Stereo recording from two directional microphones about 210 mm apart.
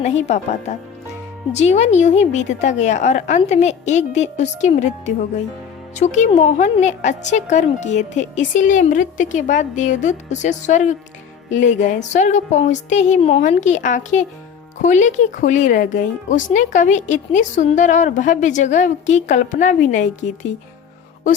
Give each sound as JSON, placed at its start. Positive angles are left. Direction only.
{"t": 0.0, "sound": "speech", "side_deg": 35}